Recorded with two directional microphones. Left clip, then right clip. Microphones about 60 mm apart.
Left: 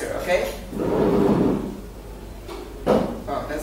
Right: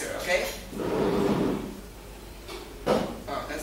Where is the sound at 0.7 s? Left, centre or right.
Right.